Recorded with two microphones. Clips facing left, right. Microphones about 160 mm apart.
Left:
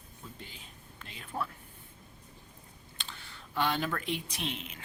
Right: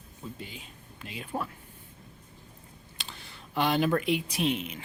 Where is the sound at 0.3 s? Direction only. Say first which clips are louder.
Right 6 dB; 15° right (ahead or behind).